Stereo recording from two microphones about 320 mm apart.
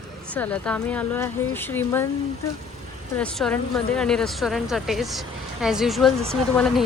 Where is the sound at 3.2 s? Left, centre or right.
Centre.